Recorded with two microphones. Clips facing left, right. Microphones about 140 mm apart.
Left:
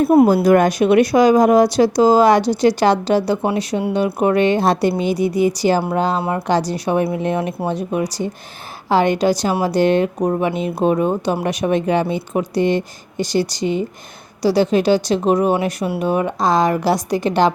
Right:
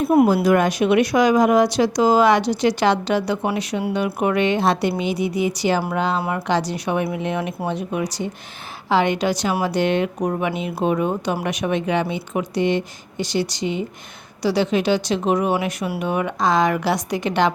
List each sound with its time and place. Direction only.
0.4 s speech: 45° left (ahead or behind)